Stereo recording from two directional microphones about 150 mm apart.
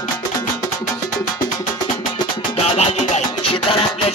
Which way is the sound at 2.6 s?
45° left (ahead or behind).